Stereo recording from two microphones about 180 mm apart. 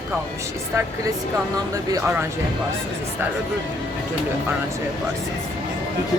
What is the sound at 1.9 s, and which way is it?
Speech, 15° right (ahead or behind).